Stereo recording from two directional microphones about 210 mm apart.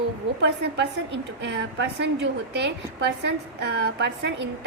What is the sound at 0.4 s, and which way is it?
A woman's voice, 55° right (ahead or behind).